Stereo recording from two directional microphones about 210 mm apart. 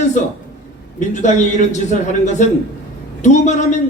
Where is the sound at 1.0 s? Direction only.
35° left (ahead or behind).